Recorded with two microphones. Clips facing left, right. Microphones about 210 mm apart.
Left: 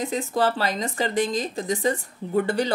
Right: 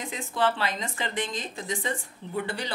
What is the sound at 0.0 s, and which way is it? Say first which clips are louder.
A woman's voice: left 5 dB; 40° left (ahead or behind).